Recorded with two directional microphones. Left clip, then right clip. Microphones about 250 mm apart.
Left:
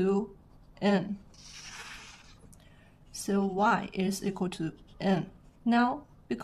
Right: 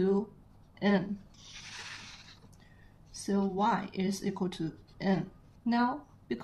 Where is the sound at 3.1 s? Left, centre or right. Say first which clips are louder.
Left 2 dB; left.